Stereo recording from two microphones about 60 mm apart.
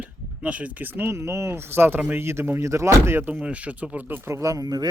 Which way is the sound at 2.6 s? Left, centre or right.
Right.